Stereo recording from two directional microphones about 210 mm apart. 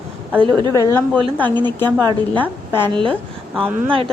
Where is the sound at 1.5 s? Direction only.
20° right (ahead or behind).